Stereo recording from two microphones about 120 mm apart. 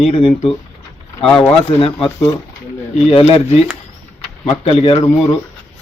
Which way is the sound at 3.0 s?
60° left (ahead or behind).